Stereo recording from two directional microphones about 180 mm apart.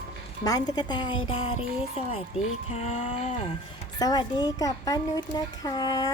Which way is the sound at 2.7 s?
35° left (ahead or behind).